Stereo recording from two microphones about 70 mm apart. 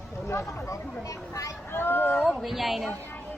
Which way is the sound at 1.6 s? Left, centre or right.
Left.